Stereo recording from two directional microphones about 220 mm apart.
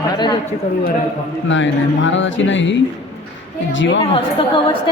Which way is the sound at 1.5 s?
60° left (ahead or behind).